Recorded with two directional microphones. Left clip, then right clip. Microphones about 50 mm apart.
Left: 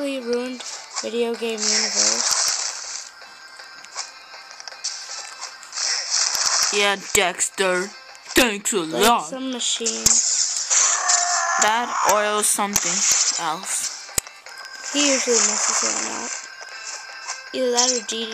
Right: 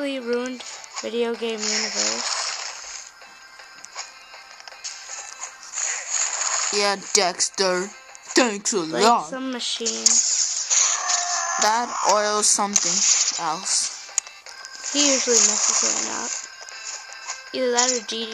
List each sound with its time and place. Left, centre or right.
0.0 s speech: left
1.2 s a sound: centre
5.4 s music: centre
9.5 s a sound: left
12.6 s speech: left
14.8 s speech: left